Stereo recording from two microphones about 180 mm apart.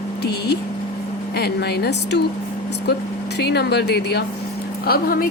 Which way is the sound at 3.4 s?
65° left (ahead or behind).